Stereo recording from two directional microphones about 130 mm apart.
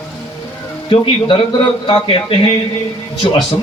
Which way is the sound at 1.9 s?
40° left (ahead or behind).